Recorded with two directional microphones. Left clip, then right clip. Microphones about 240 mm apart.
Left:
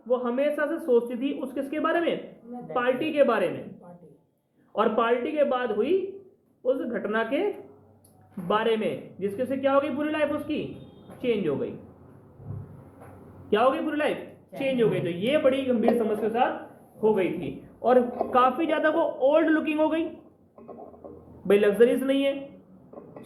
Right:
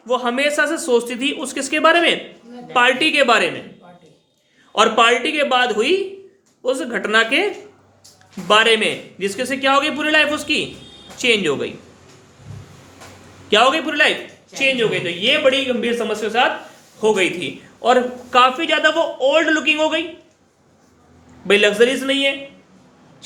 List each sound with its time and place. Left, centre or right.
0.1 s a man's voice: right
4.7 s a man's voice: right
8.4 s a man's voice: right
13.5 s a man's voice: right
14.5 s a man's voice: centre
16.2 s a man's voice: centre
17.8 s a man's voice: centre
21.4 s a man's voice: centre